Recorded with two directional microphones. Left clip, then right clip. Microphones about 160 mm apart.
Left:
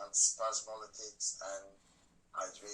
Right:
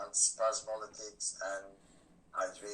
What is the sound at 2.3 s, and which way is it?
Speech, 15° right (ahead or behind).